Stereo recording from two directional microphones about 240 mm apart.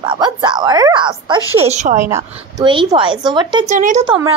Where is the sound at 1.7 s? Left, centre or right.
Right.